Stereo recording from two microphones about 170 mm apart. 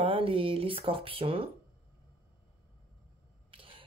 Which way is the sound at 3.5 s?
30° right (ahead or behind).